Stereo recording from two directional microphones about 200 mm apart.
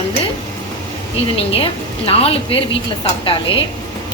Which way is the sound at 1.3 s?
30° left (ahead or behind).